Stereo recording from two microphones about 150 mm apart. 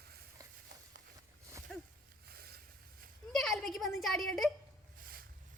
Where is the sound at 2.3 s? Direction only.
90° right.